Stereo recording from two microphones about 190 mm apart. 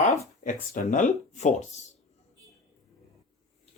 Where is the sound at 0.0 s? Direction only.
35° left (ahead or behind).